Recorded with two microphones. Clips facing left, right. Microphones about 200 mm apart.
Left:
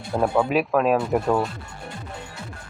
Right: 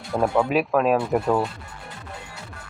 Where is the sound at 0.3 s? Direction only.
Centre (ahead or behind).